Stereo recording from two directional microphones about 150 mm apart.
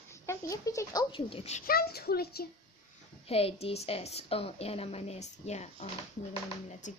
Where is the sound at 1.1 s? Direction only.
40° left (ahead or behind).